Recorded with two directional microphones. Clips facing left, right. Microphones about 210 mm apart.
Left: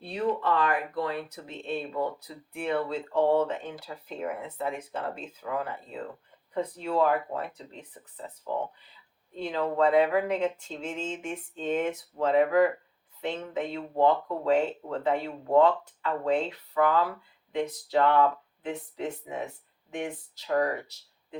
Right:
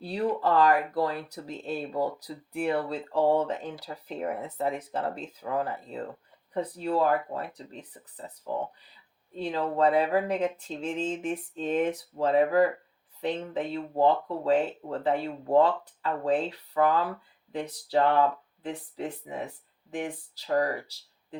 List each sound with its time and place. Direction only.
0.0 s speech: 35° right (ahead or behind)
9.4 s speech: 35° right (ahead or behind)